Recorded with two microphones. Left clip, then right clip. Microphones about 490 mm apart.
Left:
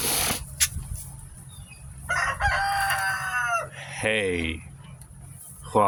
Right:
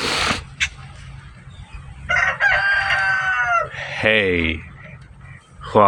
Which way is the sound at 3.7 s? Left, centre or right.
Left.